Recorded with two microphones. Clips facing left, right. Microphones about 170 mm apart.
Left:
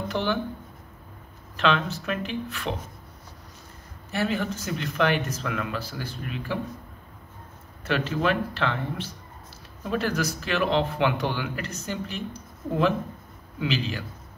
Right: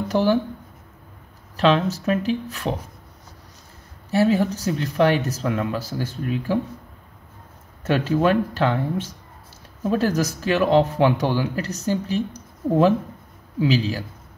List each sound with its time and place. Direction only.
0.1 s speech: 40° right (ahead or behind)
1.6 s speech: 35° right (ahead or behind)
4.1 s speech: 35° right (ahead or behind)
7.8 s speech: 45° right (ahead or behind)